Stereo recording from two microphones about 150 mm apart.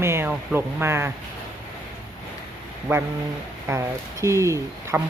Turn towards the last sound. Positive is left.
turn(degrees=-20)  # may be behind; listen again after turning